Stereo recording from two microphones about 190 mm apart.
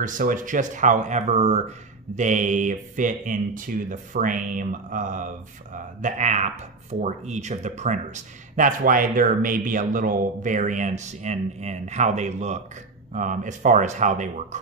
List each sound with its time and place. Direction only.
0.0 s speech: 45° right (ahead or behind)